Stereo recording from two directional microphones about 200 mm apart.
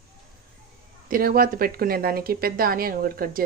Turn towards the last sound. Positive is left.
turn(degrees=-45)  # may be behind; listen again after turning